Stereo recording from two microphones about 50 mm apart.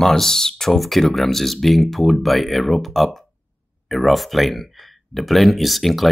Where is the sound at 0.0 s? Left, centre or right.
Centre.